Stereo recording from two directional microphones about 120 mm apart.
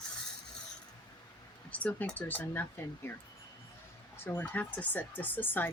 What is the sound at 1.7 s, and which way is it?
Speech, 10° left (ahead or behind).